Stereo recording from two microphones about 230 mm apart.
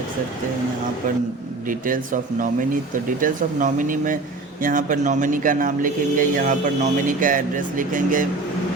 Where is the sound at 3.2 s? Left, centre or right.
Right.